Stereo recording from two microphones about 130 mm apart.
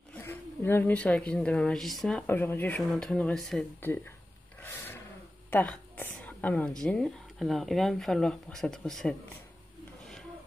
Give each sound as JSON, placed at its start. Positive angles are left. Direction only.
{"t": 0.2, "sound": "a woman's voice", "side_deg": 15}
{"t": 2.2, "sound": "a woman's voice", "side_deg": 15}
{"t": 3.8, "sound": "speech", "side_deg": 15}
{"t": 4.6, "sound": "roar", "side_deg": 15}
{"t": 5.5, "sound": "a woman's voice", "side_deg": 15}